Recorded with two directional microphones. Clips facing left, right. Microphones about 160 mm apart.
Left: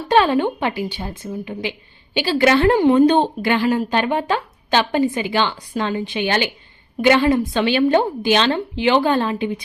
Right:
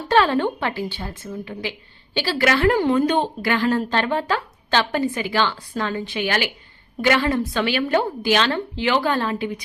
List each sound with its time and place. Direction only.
0.1 s a woman's voice: 15° left (ahead or behind)